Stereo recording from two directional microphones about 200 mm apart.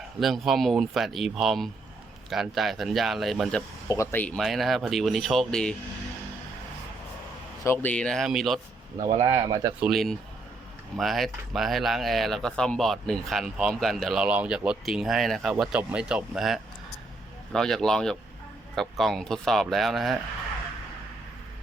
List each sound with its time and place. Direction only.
0.2 s speech: centre (ahead or behind)
3.8 s speech: 15° left (ahead or behind)
7.6 s speech: 10° left (ahead or behind)
9.0 s speech: 20° right (ahead or behind)
9.8 s speech: centre (ahead or behind)